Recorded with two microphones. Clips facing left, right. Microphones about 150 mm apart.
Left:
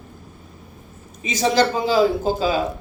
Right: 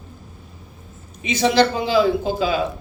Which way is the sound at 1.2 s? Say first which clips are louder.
Right 1 dB; 40° left (ahead or behind).